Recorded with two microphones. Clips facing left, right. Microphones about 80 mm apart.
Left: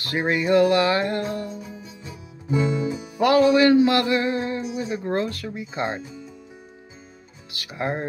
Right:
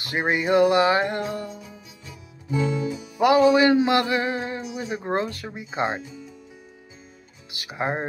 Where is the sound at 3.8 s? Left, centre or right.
Right.